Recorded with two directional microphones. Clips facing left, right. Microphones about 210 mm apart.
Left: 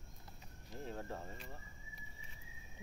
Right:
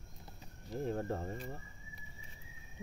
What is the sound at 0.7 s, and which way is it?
Speech, 50° right (ahead or behind).